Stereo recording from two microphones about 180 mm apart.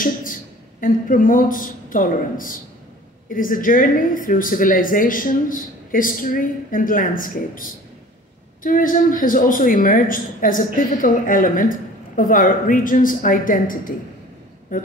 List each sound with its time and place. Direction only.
0.0 s speech: 50° left (ahead or behind)
8.6 s speech: 50° left (ahead or behind)